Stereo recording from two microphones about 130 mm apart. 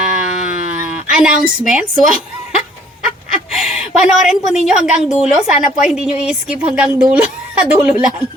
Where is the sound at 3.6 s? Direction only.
5° right (ahead or behind).